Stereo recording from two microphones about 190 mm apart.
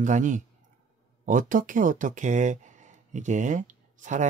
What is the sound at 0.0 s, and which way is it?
Speech, 40° right (ahead or behind).